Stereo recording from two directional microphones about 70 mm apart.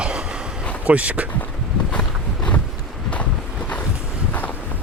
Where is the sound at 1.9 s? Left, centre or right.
Centre.